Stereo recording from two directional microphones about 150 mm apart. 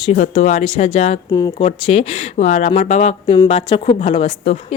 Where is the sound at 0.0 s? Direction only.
50° left (ahead or behind).